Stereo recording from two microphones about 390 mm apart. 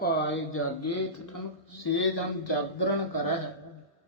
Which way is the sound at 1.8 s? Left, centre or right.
Left.